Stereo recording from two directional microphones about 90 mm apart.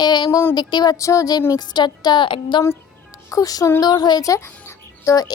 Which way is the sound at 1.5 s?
50° left (ahead or behind).